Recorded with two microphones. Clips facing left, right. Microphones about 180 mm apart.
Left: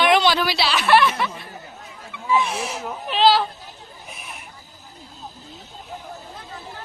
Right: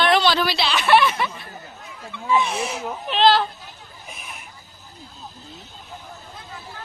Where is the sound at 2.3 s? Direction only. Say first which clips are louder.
Right 1 dB; centre (ahead or behind).